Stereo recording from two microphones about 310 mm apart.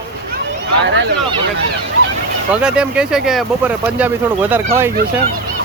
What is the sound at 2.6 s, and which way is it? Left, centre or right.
Speech, centre.